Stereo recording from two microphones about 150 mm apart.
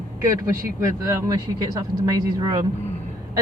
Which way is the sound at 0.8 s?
20° right (ahead or behind).